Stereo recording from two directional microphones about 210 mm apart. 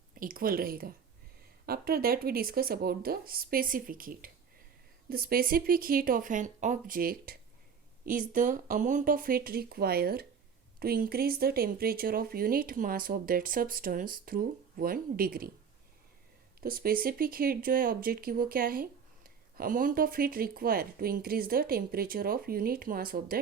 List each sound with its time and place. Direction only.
0.1 s speech: 40° right (ahead or behind)
16.6 s speech: 45° right (ahead or behind)